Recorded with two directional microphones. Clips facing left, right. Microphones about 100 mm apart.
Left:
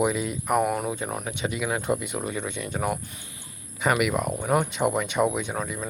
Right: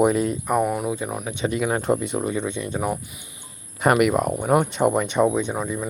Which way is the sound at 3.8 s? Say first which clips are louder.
Right 5 dB; 45° right (ahead or behind).